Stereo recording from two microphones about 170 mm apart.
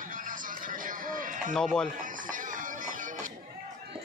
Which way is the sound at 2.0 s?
50° right (ahead or behind).